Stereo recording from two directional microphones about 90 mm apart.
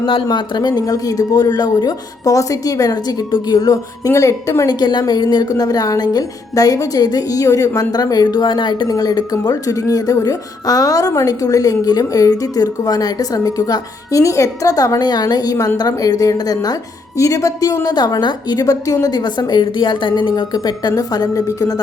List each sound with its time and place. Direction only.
0.0 s speech: 70° left (ahead or behind); by 21.8 s 40° left (ahead or behind)